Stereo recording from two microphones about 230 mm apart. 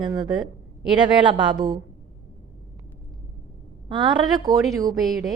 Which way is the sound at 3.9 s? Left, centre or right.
Centre.